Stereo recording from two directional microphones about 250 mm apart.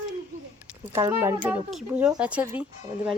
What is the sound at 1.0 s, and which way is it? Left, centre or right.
A woman's voice, centre.